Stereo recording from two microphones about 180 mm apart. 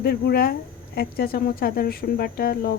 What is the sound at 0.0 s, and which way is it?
Speech, 60° left (ahead or behind).